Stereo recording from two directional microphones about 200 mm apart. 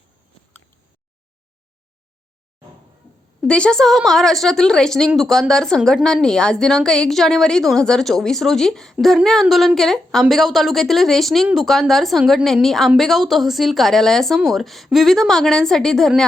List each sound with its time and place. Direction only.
3.4 s a woman's voice: 5° left (ahead or behind)